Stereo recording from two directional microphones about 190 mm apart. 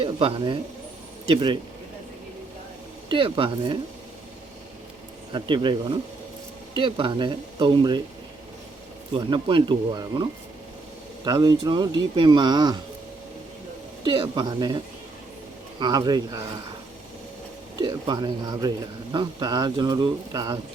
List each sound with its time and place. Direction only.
0.0 s speech: 30° right (ahead or behind)
3.1 s speech: 25° right (ahead or behind)
5.3 s speech: 25° right (ahead or behind)
9.1 s speech: 25° right (ahead or behind)
14.0 s speech: 25° right (ahead or behind)
15.8 s speech: 20° right (ahead or behind)
17.7 s speech: 25° right (ahead or behind)